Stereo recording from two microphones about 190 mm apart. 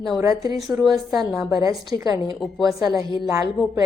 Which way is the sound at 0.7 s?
5° right (ahead or behind).